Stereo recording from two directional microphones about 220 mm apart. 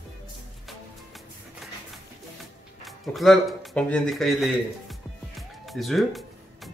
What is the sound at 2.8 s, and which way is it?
Speech, centre (ahead or behind).